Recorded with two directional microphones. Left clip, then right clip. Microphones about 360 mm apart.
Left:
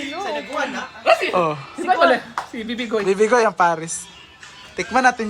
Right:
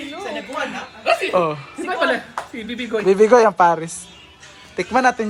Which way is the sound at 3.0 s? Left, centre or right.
Centre.